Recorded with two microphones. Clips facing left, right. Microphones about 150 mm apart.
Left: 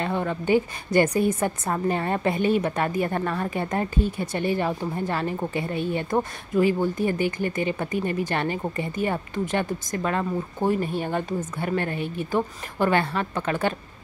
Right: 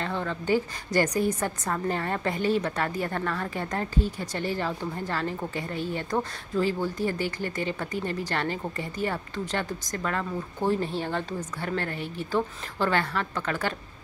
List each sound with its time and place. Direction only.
0.0 s a woman's voice: 15° left (ahead or behind)